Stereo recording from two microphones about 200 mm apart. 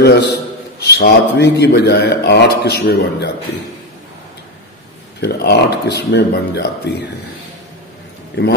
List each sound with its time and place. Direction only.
0.8 s speech: 55° left (ahead or behind)
5.2 s speech: 55° left (ahead or behind)
8.4 s a man's voice: 50° left (ahead or behind)